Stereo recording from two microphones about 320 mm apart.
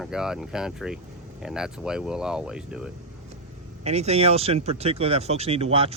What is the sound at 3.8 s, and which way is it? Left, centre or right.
Speech, centre.